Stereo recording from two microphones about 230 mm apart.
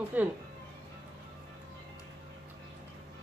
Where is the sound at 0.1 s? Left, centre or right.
Centre.